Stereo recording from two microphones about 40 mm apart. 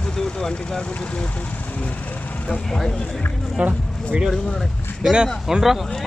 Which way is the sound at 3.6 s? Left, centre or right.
Right.